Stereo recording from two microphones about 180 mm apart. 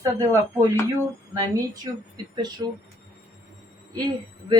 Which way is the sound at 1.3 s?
20° right (ahead or behind).